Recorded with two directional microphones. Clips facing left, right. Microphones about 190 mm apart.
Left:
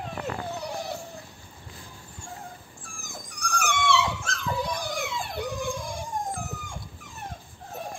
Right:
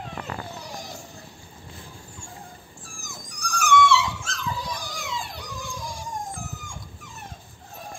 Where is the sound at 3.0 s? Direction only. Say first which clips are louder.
Left 2 dB; 55° left (ahead or behind).